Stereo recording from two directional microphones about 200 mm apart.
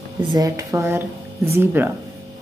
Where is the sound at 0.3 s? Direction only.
15° right (ahead or behind).